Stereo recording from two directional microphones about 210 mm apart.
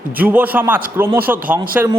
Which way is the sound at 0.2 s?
10° right (ahead or behind).